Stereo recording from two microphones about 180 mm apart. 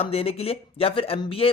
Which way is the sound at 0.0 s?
35° left (ahead or behind).